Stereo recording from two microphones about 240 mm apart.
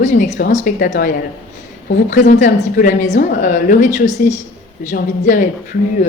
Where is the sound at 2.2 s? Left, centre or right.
Left.